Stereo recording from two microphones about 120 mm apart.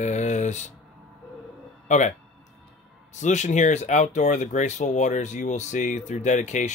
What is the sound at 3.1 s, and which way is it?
Speech, 90° left.